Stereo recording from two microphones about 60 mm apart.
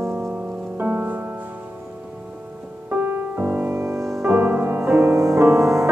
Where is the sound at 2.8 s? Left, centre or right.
Right.